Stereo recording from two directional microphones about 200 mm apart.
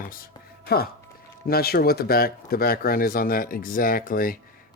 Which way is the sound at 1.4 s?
50° left (ahead or behind).